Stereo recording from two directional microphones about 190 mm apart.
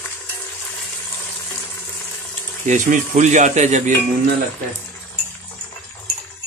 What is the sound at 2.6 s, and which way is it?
Speech, 40° right (ahead or behind).